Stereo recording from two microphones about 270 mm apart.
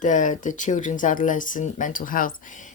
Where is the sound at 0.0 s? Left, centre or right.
Left.